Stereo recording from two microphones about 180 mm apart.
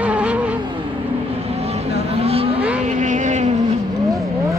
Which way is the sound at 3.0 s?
40° right (ahead or behind).